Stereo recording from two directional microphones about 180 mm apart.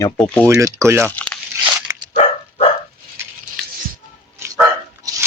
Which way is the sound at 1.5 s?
10° right (ahead or behind).